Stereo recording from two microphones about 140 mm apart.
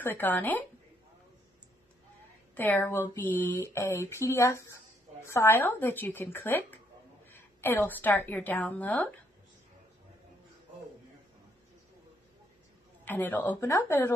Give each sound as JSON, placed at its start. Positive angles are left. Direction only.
{"t": 0.0, "sound": "speech", "side_deg": 15}
{"t": 2.5, "sound": "a woman's voice", "side_deg": 10}
{"t": 13.0, "sound": "speech", "side_deg": 15}